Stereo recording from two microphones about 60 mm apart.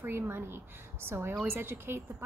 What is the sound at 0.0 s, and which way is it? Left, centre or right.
A woman's voice, right.